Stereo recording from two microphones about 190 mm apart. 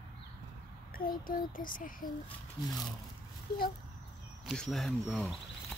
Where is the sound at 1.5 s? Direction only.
45° left (ahead or behind).